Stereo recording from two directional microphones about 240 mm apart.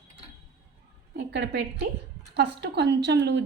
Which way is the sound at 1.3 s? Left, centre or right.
Right.